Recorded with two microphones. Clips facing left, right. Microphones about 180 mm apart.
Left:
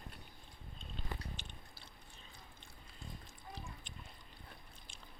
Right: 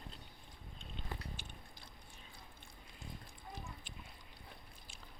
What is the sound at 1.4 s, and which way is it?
Biting, 10° right (ahead or behind).